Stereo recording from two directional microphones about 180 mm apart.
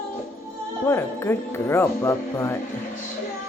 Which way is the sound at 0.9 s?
15° left (ahead or behind).